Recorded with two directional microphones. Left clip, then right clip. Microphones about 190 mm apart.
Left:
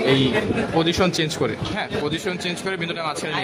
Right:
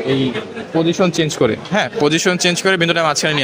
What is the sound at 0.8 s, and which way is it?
Speech, 35° right (ahead or behind).